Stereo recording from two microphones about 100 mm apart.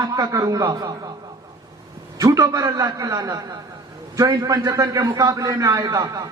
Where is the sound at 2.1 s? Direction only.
35° right (ahead or behind).